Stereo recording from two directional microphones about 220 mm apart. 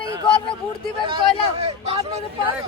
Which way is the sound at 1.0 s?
25° right (ahead or behind).